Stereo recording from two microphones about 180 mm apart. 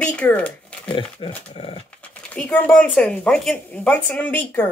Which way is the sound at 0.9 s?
30° left (ahead or behind).